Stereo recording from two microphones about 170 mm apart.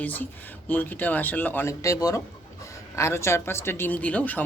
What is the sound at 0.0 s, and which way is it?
Speech, 10° left (ahead or behind).